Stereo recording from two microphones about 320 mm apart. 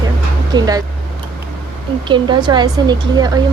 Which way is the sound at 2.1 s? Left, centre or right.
Centre.